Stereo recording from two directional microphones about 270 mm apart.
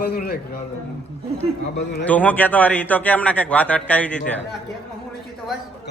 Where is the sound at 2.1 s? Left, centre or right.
Centre.